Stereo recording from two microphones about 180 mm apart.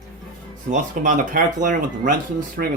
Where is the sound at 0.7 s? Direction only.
45° right (ahead or behind).